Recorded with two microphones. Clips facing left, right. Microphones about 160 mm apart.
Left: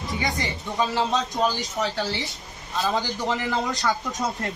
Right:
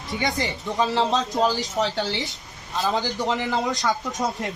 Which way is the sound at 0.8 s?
20° right (ahead or behind).